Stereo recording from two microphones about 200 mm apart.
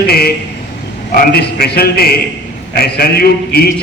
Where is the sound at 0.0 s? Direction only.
50° left (ahead or behind).